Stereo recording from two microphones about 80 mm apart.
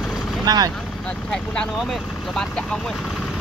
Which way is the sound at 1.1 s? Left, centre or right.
Centre.